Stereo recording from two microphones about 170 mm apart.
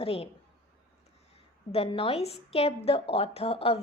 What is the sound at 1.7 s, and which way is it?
A woman's voice, 35° left (ahead or behind).